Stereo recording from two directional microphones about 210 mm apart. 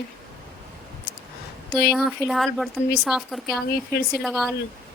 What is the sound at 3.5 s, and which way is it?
Speech, 50° left (ahead or behind).